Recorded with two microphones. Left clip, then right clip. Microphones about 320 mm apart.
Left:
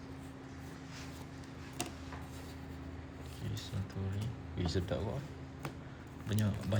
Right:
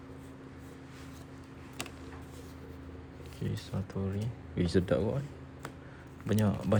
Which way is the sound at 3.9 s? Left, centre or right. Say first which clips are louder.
Right 6 dB; centre.